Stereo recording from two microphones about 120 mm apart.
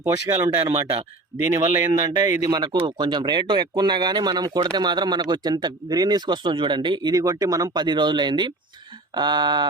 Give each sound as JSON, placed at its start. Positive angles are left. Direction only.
{"t": 0.0, "sound": "speech", "side_deg": -25}